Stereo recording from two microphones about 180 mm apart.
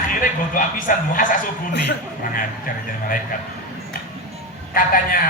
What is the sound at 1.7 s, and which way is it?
Speech, 70° left (ahead or behind).